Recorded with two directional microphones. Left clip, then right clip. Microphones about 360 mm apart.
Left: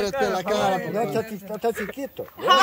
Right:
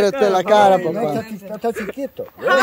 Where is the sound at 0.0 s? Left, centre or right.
Centre.